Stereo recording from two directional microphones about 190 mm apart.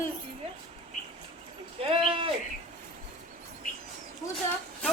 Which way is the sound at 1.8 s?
30° right (ahead or behind).